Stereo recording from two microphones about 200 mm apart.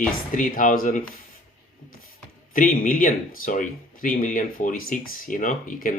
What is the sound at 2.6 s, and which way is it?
Speech, 40° left (ahead or behind).